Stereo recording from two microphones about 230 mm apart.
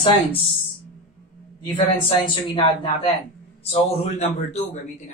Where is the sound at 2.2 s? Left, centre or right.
Left.